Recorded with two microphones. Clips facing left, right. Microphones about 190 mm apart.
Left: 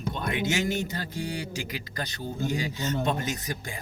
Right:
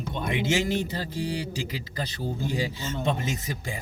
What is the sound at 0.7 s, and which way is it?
Music, 30° right (ahead or behind).